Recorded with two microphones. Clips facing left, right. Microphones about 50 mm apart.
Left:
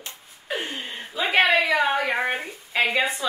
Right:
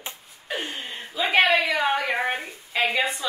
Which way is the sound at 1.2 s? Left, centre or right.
Centre.